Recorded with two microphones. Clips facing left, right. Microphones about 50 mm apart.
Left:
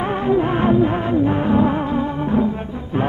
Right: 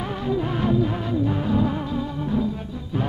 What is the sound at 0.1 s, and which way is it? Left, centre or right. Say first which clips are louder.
Music: left 7 dB; left.